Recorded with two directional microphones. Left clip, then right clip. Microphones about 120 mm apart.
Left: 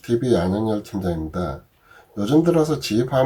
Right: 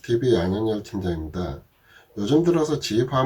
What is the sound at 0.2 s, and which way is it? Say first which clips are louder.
Speech: even; 20° left (ahead or behind).